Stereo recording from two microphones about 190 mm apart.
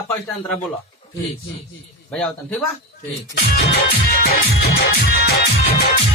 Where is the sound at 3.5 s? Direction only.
60° left (ahead or behind).